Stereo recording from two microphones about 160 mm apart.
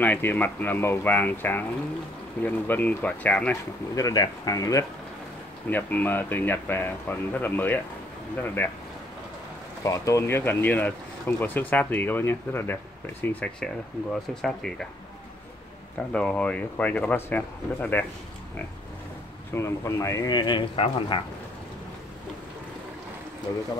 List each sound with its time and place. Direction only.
0.0 s speech: 10° left (ahead or behind)
3.9 s speech: 25° left (ahead or behind)
5.7 s speech: 10° left (ahead or behind)
9.8 s speech: 20° left (ahead or behind); by 14.9 s 5° left (ahead or behind)
16.1 s speech: 5° left (ahead or behind)
19.5 s speech: 15° left (ahead or behind); by 21.2 s 35° left (ahead or behind)